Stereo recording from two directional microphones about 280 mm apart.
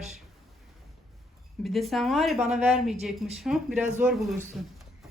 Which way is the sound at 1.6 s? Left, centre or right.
Centre.